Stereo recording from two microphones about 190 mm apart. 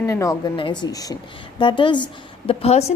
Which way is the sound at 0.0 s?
15° left (ahead or behind).